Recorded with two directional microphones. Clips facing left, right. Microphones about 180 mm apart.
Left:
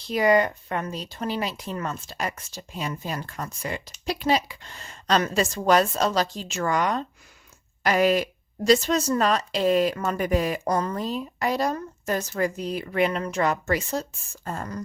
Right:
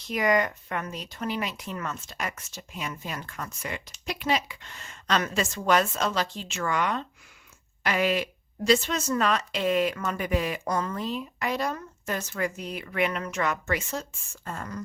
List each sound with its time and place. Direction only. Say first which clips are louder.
0.1 s speech: left 4 dB; 30° left (ahead or behind)